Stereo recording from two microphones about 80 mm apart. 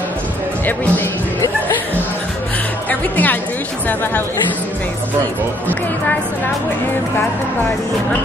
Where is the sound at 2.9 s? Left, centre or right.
Left.